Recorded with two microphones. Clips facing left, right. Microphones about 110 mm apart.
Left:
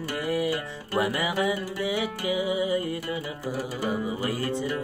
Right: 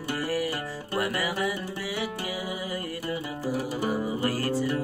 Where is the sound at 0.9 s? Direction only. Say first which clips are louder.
Left 3 dB; 20° left (ahead or behind).